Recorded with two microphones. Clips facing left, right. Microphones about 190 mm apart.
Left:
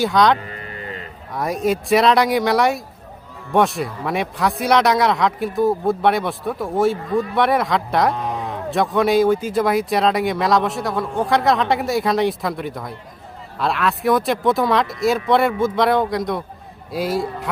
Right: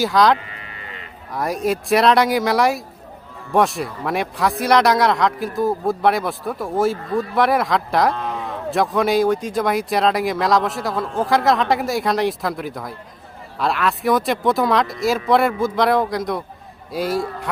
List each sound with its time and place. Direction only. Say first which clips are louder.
0.0 s speech: even; centre (ahead or behind)
0.3 s livestock: left 5 dB; 40° left (ahead or behind)
1.3 s speech: left 1 dB; centre (ahead or behind)
8.1 s a sound: left 1 dB; 15° left (ahead or behind)
8.7 s speech: left 1 dB; centre (ahead or behind)